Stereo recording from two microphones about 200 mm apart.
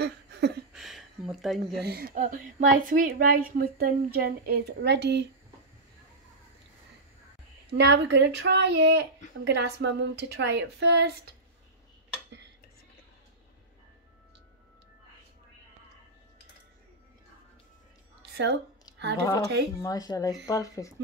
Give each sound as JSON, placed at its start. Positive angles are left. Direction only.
{"t": 0.0, "sound": "a sound", "side_deg": -55}
{"t": 0.7, "sound": "a sound", "side_deg": 0}
{"t": 1.8, "sound": "a woman's voice", "side_deg": -50}
{"t": 7.7, "sound": "a woman's voice", "side_deg": -60}
{"t": 18.3, "sound": "speech", "side_deg": -55}
{"t": 19.8, "sound": "speech", "side_deg": 20}